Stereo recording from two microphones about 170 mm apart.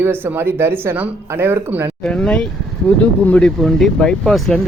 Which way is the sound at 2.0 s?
5° left (ahead or behind).